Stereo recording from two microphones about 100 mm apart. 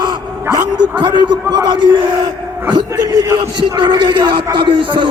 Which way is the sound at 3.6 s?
50° right (ahead or behind).